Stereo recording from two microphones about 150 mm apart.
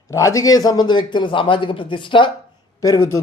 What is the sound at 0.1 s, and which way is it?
Speech, 20° left (ahead or behind).